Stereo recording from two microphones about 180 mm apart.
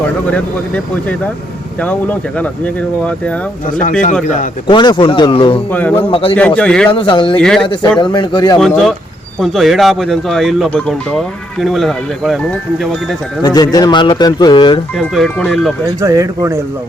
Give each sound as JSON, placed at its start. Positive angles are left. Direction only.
{"t": 1.8, "sound": "speech", "side_deg": 10}
{"t": 4.6, "sound": "speech", "side_deg": 25}
{"t": 5.7, "sound": "speech", "side_deg": 10}
{"t": 6.1, "sound": "a man's voice", "side_deg": 30}
{"t": 6.6, "sound": "speech", "side_deg": 5}
{"t": 6.9, "sound": "speech", "side_deg": 30}
{"t": 7.3, "sound": "speech", "side_deg": 5}
{"t": 7.9, "sound": "speech", "side_deg": 25}
{"t": 8.5, "sound": "speech", "side_deg": 0}
{"t": 13.4, "sound": "speech", "side_deg": 20}
{"t": 14.9, "sound": "speech", "side_deg": 0}
{"t": 16.0, "sound": "speech", "side_deg": -15}